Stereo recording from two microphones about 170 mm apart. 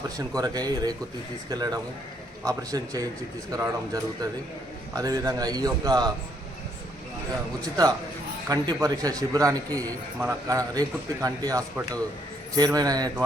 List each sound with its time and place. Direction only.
0.3 s a man's voice: 25° right (ahead or behind)
7.6 s a man's voice: 20° right (ahead or behind)